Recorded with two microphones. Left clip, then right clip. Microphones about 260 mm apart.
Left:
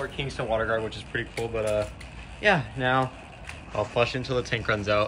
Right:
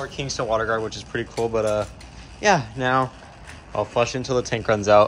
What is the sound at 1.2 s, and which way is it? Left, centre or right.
Speech, right.